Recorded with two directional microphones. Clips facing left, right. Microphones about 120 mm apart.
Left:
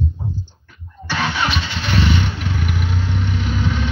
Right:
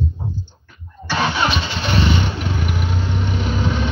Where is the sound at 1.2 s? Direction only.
25° right (ahead or behind).